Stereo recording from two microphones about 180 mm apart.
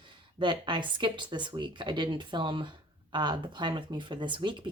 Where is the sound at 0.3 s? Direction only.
25° right (ahead or behind).